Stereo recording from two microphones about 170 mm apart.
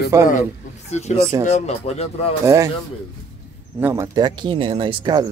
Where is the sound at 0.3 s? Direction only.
45° left (ahead or behind).